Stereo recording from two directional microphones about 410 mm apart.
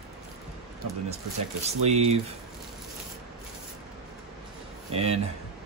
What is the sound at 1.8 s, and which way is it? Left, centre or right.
Speech, centre.